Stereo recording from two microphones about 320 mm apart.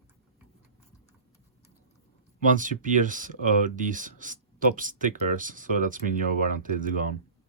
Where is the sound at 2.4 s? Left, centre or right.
Right.